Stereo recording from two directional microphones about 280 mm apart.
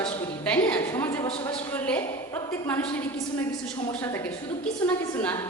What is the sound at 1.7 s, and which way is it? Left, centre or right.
A woman's voice, centre.